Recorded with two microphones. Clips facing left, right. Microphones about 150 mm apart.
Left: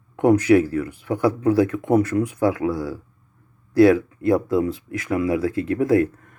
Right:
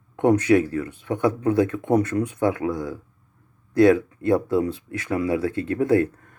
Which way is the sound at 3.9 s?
30° right (ahead or behind).